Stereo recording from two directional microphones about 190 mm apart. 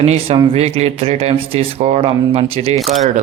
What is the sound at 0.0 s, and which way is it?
A man's voice, 35° right (ahead or behind).